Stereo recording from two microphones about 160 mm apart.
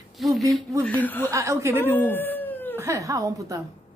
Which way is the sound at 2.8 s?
20° right (ahead or behind).